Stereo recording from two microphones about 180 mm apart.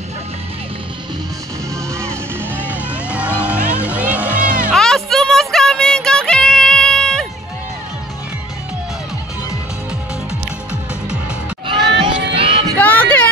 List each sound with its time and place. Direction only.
2.0 s vehicle: 10° right (ahead or behind)
4.6 s music: centre (ahead or behind)
11.8 s crowd: 75° right (ahead or behind)
12.7 s a sound: 10° left (ahead or behind)